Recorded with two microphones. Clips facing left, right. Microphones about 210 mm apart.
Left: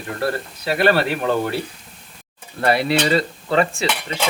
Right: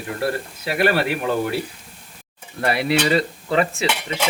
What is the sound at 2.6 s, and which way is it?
Speech, 35° left (ahead or behind).